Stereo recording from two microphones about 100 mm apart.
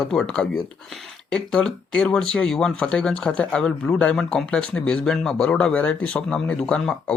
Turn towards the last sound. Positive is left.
turn(degrees=10)  # may be behind; listen again after turning